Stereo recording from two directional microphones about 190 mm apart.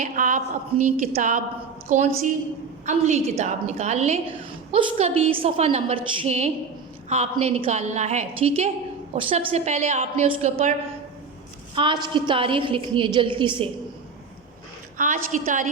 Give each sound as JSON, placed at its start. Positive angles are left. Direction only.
{"t": 0.0, "sound": "a woman's voice", "side_deg": -40}
{"t": 11.7, "sound": "a woman's voice", "side_deg": -25}
{"t": 14.9, "sound": "a woman's voice", "side_deg": -45}